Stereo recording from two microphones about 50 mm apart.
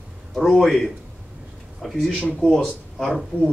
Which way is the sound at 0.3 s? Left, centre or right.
Centre.